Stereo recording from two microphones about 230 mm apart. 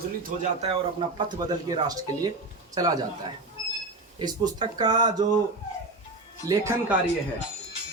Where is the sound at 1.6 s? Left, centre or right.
Centre.